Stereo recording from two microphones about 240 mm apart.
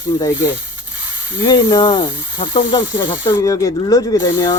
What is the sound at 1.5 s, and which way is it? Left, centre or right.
Speech, centre.